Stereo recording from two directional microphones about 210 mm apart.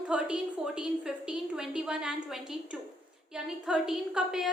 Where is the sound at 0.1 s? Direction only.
5° right (ahead or behind).